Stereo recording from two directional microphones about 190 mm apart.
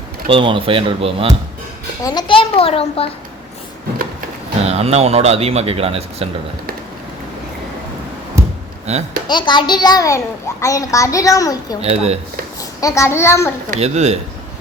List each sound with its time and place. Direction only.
0.3 s speech: 25° right (ahead or behind)
2.0 s a child's voice: 25° left (ahead or behind)
4.6 s speech: 35° right (ahead or behind)
8.4 s a sound: 15° right (ahead or behind)
8.9 s speech: 35° right (ahead or behind)
9.2 s a child's voice: 25° left (ahead or behind)
11.8 s speech: 35° right (ahead or behind)
12.8 s a child's voice: 15° left (ahead or behind)
13.7 s speech: 35° right (ahead or behind)